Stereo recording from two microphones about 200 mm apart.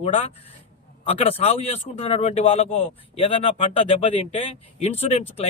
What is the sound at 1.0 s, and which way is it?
Speech, 30° left (ahead or behind).